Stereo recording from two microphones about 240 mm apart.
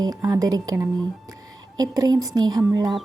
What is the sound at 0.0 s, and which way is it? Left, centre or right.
Speech, centre.